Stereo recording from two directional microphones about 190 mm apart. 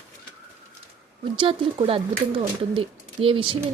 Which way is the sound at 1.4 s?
25° right (ahead or behind).